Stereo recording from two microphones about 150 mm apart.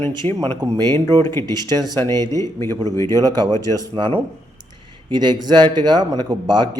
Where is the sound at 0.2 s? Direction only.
40° right (ahead or behind).